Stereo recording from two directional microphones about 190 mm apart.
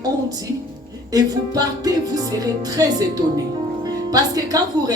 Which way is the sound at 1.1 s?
20° right (ahead or behind).